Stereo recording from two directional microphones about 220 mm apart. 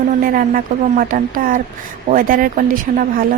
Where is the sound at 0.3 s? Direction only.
40° right (ahead or behind).